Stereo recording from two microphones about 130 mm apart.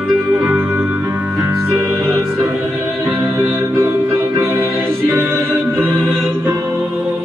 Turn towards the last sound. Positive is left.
turn(degrees=-20)  # may be behind; listen again after turning